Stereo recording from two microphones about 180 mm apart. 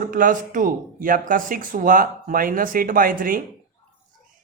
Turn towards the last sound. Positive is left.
turn(degrees=-50)  # may be behind; listen again after turning